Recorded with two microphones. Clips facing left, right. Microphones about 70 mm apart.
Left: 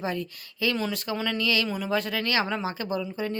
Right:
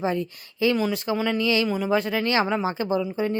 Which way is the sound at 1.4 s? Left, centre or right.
Right.